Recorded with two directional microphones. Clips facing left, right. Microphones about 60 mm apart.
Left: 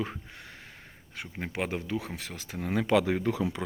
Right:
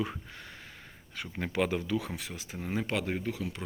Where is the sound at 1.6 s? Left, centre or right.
Left.